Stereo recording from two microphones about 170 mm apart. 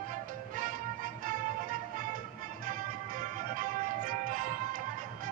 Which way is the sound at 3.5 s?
50° right (ahead or behind).